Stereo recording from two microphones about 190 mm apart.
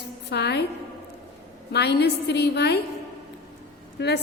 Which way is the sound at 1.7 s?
60° left (ahead or behind).